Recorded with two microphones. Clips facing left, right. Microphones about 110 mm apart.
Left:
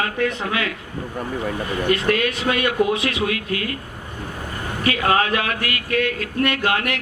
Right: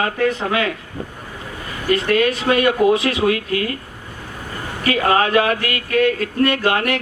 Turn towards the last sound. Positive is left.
turn(degrees=-35)  # may be behind; listen again after turning